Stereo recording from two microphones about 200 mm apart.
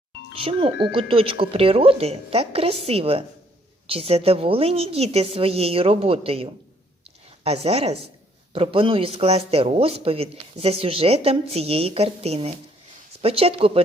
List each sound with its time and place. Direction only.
0.3 s speech: 25° right (ahead or behind)